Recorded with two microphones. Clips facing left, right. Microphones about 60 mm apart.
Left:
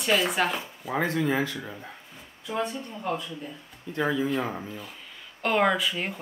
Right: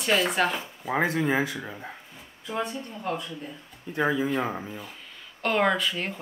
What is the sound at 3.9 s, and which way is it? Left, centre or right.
Speech, centre.